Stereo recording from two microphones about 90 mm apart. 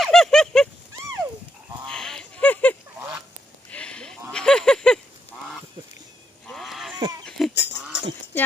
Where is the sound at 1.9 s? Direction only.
5° left (ahead or behind).